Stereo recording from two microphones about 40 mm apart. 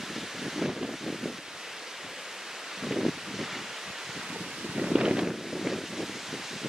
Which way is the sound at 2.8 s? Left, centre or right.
Centre.